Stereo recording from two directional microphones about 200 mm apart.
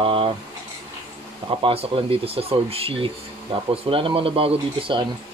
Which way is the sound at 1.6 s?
25° right (ahead or behind).